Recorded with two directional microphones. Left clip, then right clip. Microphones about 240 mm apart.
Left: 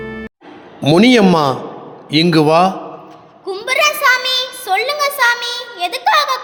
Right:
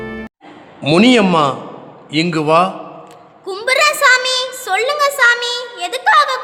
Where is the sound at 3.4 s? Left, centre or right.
Centre.